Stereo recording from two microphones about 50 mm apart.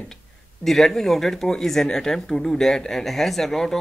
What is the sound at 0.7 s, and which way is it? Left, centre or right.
Speech, centre.